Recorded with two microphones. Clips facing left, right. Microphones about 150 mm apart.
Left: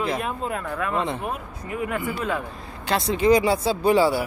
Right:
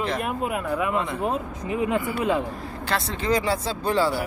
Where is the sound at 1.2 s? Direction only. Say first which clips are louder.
Right 5 dB; 25° right (ahead or behind).